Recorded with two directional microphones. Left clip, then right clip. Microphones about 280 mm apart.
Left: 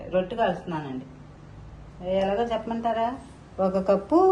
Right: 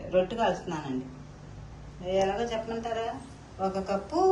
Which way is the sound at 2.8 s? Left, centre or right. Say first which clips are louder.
Left 7 dB; centre.